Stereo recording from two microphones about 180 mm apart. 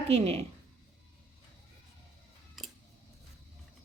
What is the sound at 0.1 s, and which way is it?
Speech, 35° right (ahead or behind).